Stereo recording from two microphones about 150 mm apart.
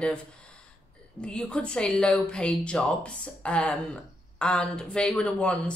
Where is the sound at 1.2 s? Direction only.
5° left (ahead or behind).